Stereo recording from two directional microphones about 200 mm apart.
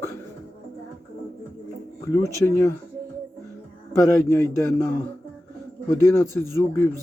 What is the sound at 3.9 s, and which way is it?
Speech, 15° left (ahead or behind).